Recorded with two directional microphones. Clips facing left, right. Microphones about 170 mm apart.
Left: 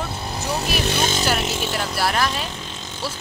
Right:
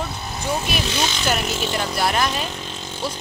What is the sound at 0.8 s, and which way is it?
Speech, 50° left (ahead or behind).